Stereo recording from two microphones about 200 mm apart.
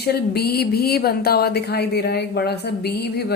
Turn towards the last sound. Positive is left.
turn(degrees=55)  # may be behind; listen again after turning